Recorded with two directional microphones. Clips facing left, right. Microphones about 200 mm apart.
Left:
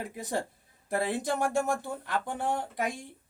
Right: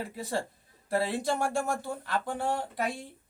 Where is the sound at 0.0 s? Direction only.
15° left (ahead or behind).